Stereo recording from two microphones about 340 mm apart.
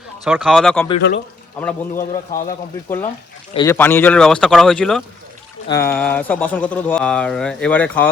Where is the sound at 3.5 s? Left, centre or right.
Centre.